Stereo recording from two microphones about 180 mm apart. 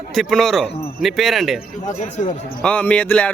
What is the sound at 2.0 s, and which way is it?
Speech, 45° left (ahead or behind).